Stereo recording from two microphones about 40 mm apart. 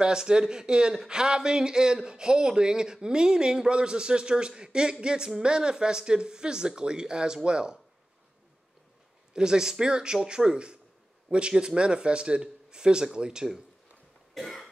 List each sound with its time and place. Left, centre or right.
0.0 s speech: centre
9.3 s speech: centre
14.3 s cough: centre